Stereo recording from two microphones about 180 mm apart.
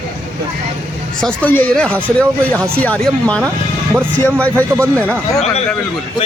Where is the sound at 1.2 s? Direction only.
5° left (ahead or behind).